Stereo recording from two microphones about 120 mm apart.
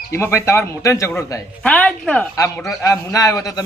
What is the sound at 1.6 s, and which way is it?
Speech, 10° left (ahead or behind).